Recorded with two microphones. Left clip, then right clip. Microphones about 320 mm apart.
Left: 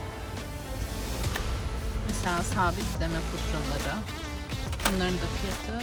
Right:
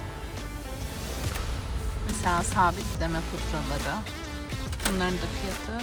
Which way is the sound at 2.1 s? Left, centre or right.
Centre.